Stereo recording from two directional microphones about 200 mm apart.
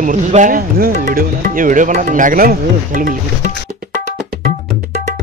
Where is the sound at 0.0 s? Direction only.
40° right (ahead or behind).